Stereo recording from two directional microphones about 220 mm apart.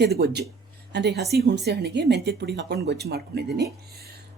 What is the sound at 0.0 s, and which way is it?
Speech, 45° right (ahead or behind).